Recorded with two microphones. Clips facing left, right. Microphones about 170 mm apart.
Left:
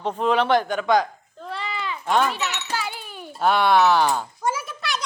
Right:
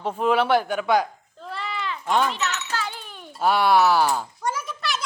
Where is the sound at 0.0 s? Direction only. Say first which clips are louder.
Even; 10° right (ahead or behind).